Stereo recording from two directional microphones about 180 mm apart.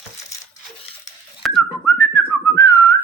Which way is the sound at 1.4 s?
Centre (ahead or behind).